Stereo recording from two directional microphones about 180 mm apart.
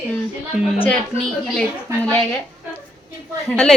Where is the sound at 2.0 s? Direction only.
10° left (ahead or behind).